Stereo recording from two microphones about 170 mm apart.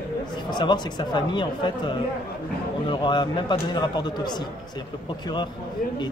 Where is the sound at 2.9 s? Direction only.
25° left (ahead or behind).